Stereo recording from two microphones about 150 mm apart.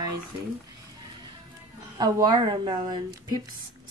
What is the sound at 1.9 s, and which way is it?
Speech, 25° right (ahead or behind).